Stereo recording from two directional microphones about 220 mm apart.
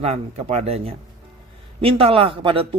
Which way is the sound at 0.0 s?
30° right (ahead or behind).